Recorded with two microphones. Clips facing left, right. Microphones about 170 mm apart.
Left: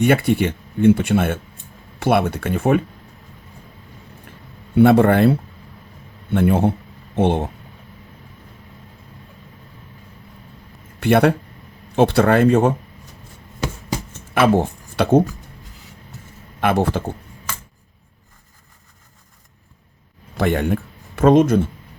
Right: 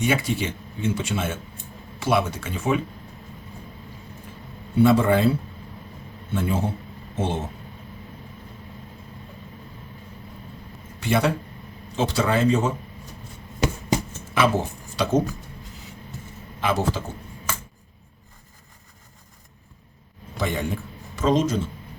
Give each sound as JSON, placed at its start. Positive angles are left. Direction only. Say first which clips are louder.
{"t": 0.0, "sound": "speech", "louder": "left 7 dB", "side_deg": 60}
{"t": 4.8, "sound": "speech", "louder": "left 5 dB", "side_deg": 60}
{"t": 11.0, "sound": "speech", "louder": "left 7 dB", "side_deg": 60}
{"t": 14.3, "sound": "speech", "louder": "left 6 dB", "side_deg": 55}
{"t": 16.6, "sound": "speech", "louder": "left 5 dB", "side_deg": 60}
{"t": 20.3, "sound": "a man's voice", "louder": "left 7 dB", "side_deg": 60}